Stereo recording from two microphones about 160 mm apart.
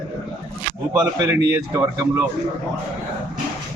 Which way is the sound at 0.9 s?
20° right (ahead or behind).